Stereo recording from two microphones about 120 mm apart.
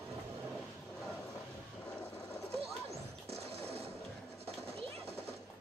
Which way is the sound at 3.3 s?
55° right (ahead or behind).